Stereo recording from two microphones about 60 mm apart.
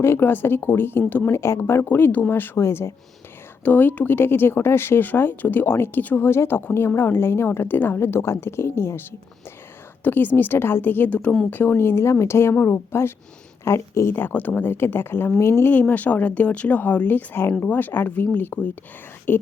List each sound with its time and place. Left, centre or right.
0.0 s speech: left
1.3 s a woman's voice: left
1.8 s speech: left
2.6 s a woman's voice: left
3.6 s speech: left
6.2 s a woman's voice: left
10.0 s speech: left
11.1 s speech: left
11.5 s a woman's voice: left
14.1 s speech: left
15.4 s a woman's voice: left
15.7 s speech: left